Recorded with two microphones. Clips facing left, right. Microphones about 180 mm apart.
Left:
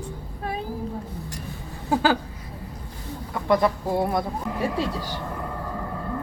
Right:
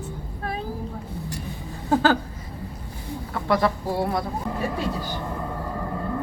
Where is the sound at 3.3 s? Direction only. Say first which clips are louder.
Left 1 dB; 20° left (ahead or behind).